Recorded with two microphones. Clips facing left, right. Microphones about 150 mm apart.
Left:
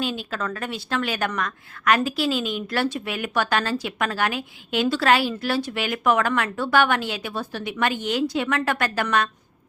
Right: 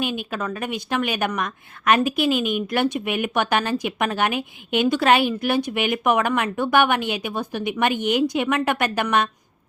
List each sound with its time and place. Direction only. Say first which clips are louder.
0.0 s a woman's voice: right 1 dB; 15° right (ahead or behind)